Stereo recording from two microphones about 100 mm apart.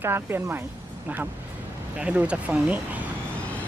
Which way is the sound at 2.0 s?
15° right (ahead or behind).